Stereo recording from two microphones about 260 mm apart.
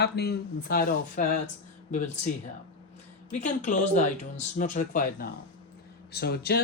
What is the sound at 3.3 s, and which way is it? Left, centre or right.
Speech, left.